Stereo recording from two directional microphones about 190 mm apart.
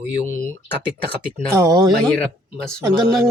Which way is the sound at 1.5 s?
15° right (ahead or behind).